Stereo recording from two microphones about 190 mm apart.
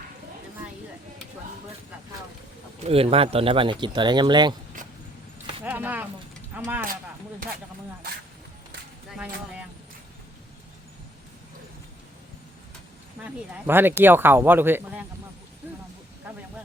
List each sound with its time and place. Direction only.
2.8 s speech: 30° right (ahead or behind)
5.6 s a sound: 10° right (ahead or behind)
6.5 s speech: 10° right (ahead or behind)
9.1 s speech: 5° right (ahead or behind)
13.1 s speech: 10° right (ahead or behind)